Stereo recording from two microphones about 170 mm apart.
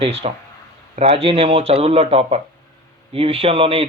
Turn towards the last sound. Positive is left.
turn(degrees=-35)  # may be behind; listen again after turning